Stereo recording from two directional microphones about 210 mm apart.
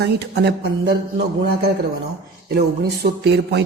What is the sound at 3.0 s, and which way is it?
Speech, 50° right (ahead or behind).